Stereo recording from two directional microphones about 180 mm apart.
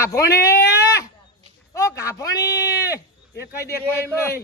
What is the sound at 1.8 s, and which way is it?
Speech, 15° left (ahead or behind).